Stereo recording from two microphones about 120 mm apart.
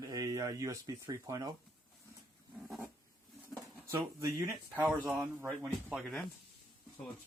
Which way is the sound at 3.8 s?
25° right (ahead or behind).